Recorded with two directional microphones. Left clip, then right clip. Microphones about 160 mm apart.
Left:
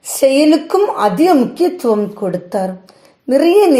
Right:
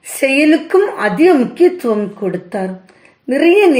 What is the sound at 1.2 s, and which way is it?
Speech, 25° left (ahead or behind).